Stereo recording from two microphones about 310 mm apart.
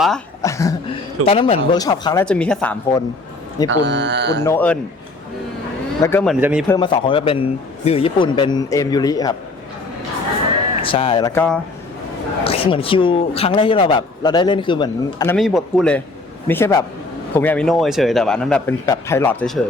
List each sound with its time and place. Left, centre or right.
0.0 s a sound: centre
1.2 s a man's voice: centre
3.7 s speech: right
4.4 s a man's voice: centre
6.0 s a man's voice: centre
6.4 s a man's voice: centre
6.7 s a man's voice: centre
10.8 s a man's voice: centre
12.5 s a man's voice: centre
15.4 s a man's voice: centre